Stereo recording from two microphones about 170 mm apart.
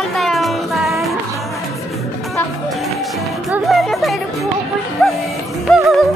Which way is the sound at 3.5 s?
Centre (ahead or behind).